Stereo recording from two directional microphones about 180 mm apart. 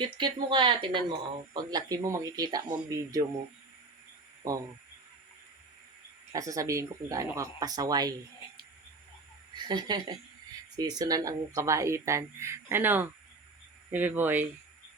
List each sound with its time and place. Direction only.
0.2 s speech: 25° right (ahead or behind)
4.4 s speech: 20° right (ahead or behind)
6.3 s speech: 20° right (ahead or behind)
9.6 s speech: 25° right (ahead or behind)